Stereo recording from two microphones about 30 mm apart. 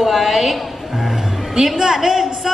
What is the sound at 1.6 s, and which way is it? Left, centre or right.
Speech, centre.